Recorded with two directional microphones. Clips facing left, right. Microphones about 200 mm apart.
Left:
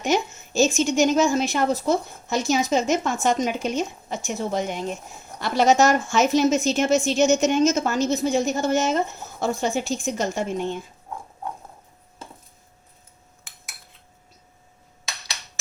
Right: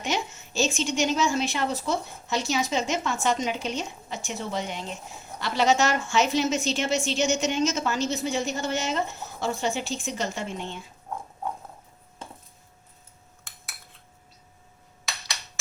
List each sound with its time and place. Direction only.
0.0 s a woman's voice: 45° left (ahead or behind)